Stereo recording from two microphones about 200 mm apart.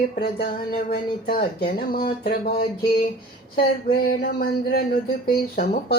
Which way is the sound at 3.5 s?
50° left (ahead or behind).